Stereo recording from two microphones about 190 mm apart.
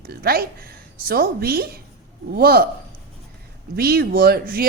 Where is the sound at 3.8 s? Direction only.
55° right (ahead or behind).